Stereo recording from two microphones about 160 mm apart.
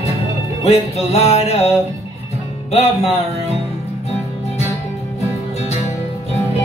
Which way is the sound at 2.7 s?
40° left (ahead or behind).